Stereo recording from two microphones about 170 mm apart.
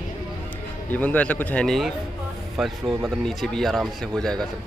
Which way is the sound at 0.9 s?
10° left (ahead or behind).